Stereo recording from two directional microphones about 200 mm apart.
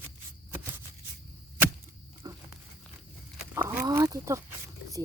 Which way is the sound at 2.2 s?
15° right (ahead or behind).